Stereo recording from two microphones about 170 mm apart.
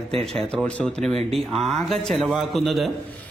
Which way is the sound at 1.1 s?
35° right (ahead or behind).